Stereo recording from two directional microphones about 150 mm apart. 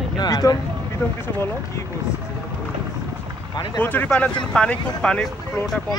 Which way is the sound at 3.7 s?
10° left (ahead or behind).